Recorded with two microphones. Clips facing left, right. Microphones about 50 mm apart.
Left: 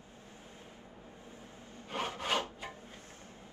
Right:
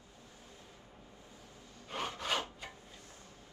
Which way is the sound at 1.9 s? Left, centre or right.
Centre.